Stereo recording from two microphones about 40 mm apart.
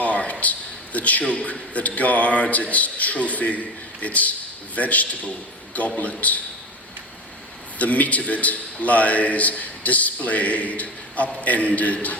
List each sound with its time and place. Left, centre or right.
0.0 s a sound: left
0.9 s a man's voice: left
7.8 s a man's voice: left